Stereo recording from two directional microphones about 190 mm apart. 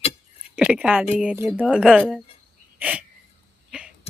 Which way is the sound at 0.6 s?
5° right (ahead or behind).